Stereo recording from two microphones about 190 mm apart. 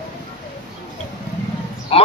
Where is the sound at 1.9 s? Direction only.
30° left (ahead or behind).